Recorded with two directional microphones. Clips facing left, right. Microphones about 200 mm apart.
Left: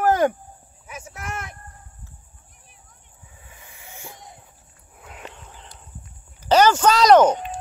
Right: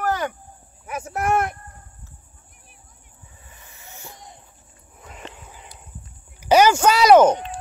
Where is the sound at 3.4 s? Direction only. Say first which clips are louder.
Left 2 dB; 10° left (ahead or behind).